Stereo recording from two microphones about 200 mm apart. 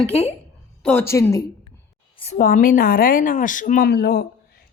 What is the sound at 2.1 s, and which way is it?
Speech, 35° left (ahead or behind).